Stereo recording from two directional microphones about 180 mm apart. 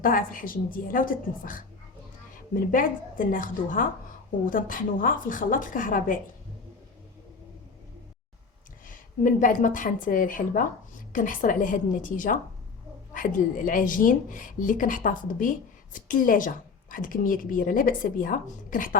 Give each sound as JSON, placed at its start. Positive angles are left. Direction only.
{"t": 0.0, "sound": "speech", "side_deg": 50}
{"t": 2.7, "sound": "speech", "side_deg": 50}
{"t": 8.9, "sound": "speech", "side_deg": 50}